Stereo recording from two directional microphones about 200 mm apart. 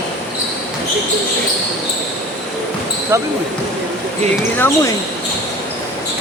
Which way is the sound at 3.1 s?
15° right (ahead or behind).